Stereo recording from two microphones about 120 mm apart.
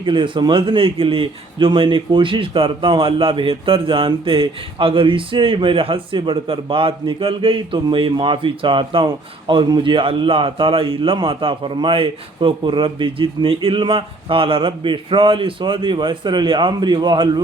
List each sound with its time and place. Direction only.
0.0 s a man's voice: 45° right (ahead or behind)